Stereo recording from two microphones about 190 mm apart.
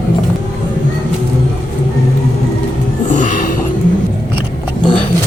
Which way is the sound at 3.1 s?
45° left (ahead or behind).